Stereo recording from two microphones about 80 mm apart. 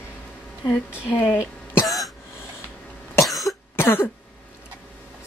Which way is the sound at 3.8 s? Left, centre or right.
Left.